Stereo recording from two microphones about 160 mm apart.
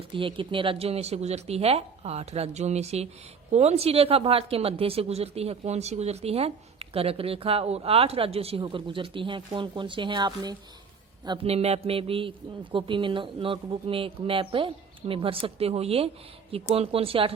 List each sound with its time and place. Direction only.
0.1 s speech: 35° right (ahead or behind)
11.4 s speech: 40° right (ahead or behind)